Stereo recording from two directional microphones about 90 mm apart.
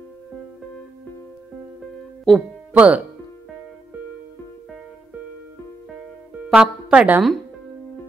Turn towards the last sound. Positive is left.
turn(degrees=-10)  # may be behind; listen again after turning